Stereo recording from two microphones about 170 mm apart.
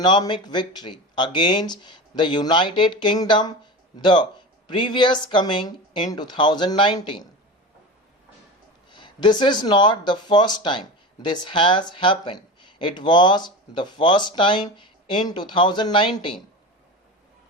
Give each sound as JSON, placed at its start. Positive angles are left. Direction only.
{"t": 0.0, "sound": "speech", "side_deg": 25}
{"t": 8.9, "sound": "speech", "side_deg": 25}